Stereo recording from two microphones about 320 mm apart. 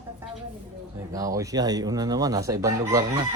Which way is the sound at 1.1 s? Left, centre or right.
Centre.